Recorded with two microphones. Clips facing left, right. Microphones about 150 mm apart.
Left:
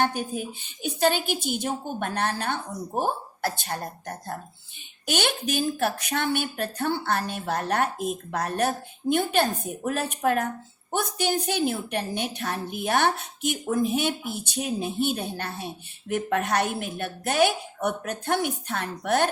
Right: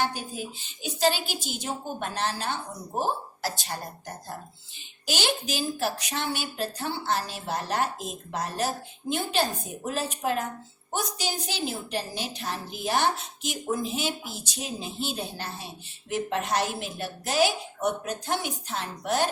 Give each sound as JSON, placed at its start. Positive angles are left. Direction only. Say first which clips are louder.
{"t": 0.0, "sound": "a woman's voice", "louder": "left 4 dB", "side_deg": 55}